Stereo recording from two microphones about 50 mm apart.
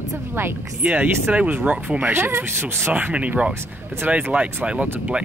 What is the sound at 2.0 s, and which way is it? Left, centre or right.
Speech, right.